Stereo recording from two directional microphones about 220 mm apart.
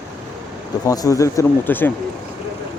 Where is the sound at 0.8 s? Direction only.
15° left (ahead or behind).